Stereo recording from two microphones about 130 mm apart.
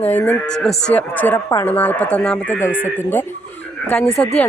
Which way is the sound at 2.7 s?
90° left.